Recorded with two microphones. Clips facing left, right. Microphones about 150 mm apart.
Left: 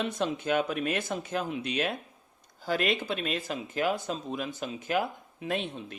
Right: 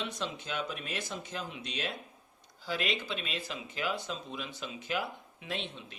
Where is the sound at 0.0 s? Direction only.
55° left (ahead or behind).